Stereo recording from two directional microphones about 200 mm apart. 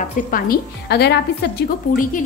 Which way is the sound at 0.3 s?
50° left (ahead or behind).